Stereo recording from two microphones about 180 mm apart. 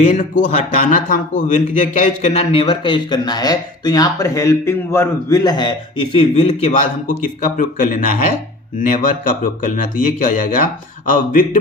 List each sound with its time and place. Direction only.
0.2 s a man's voice: 45° left (ahead or behind)